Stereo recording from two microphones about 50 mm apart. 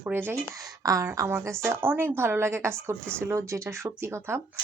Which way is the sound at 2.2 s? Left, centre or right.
Right.